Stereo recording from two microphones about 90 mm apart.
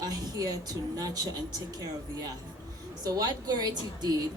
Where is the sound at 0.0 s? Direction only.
45° right (ahead or behind).